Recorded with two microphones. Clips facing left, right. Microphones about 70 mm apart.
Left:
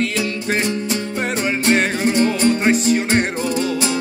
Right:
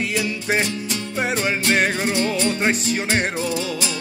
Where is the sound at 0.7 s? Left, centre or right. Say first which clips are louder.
Left 5 dB; left.